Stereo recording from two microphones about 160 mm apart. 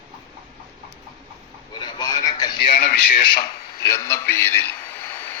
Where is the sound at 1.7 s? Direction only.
30° left (ahead or behind).